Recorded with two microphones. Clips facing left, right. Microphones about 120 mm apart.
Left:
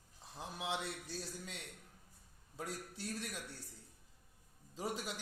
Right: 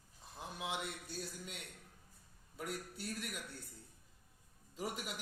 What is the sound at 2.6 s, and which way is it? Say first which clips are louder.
Speech: right 1 dB; 30° left (ahead or behind).